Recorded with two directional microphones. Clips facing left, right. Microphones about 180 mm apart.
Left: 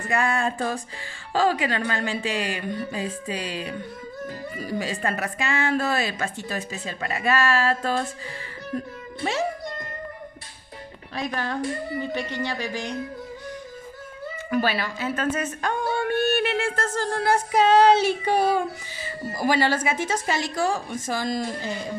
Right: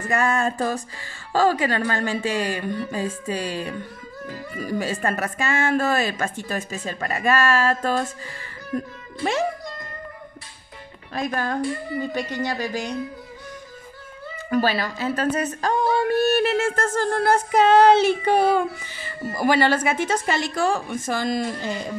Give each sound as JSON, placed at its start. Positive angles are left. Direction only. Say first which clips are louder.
{"t": 0.1, "sound": "speech", "louder": "right 2 dB", "side_deg": -45}
{"t": 11.1, "sound": "speech", "louder": "right 3 dB", "side_deg": -45}
{"t": 14.5, "sound": "a woman's voice", "louder": "right 3 dB", "side_deg": -40}